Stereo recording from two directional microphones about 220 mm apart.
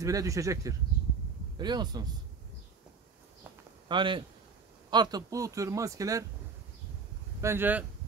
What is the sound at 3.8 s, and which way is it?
A man's voice, 20° right (ahead or behind).